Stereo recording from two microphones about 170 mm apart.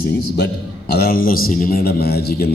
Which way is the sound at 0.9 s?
60° left (ahead or behind).